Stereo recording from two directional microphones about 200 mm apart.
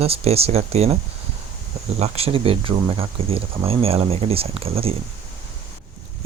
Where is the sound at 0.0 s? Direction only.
30° right (ahead or behind).